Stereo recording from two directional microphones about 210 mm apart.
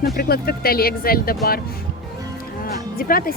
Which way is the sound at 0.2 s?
45° left (ahead or behind).